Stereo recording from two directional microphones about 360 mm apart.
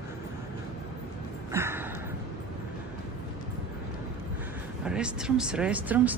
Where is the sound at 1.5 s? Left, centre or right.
Centre.